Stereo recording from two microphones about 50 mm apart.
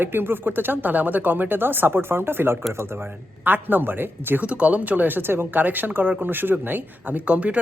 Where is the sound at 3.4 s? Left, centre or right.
Right.